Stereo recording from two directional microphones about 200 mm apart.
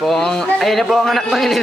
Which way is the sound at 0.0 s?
Centre (ahead or behind).